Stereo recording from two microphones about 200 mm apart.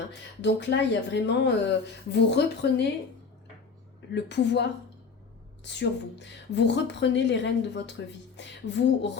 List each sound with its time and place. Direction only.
0.4 s a woman's voice: 60° left (ahead or behind)
4.1 s a woman's voice: 60° left (ahead or behind)